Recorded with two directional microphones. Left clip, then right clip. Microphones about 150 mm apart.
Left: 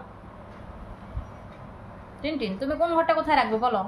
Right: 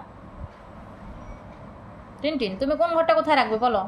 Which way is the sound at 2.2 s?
55° right (ahead or behind).